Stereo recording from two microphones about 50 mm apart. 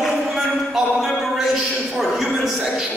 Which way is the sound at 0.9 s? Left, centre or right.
Centre.